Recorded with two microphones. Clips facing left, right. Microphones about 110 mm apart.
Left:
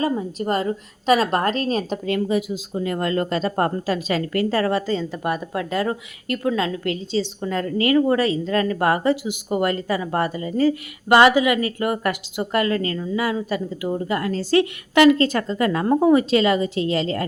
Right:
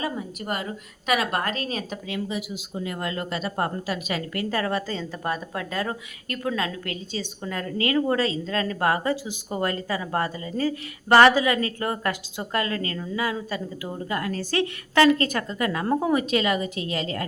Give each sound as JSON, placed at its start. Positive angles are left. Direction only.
{"t": 0.0, "sound": "a woman's voice", "side_deg": 35}
{"t": 2.0, "sound": "speech", "side_deg": 50}
{"t": 2.8, "sound": "a woman's voice", "side_deg": 40}
{"t": 14.1, "sound": "speech", "side_deg": 25}
{"t": 15.9, "sound": "speech", "side_deg": 15}
{"t": 16.1, "sound": "speech", "side_deg": 30}